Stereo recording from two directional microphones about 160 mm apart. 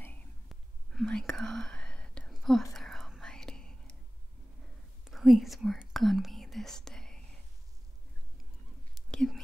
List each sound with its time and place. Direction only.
0.5 s whispering: centre (ahead or behind)
5.0 s whispering: centre (ahead or behind)
9.1 s whispering: 5° left (ahead or behind)